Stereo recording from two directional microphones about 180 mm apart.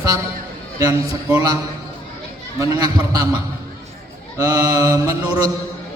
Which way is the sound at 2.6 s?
20° right (ahead or behind).